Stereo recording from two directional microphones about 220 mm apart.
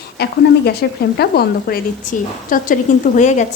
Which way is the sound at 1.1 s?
45° left (ahead or behind).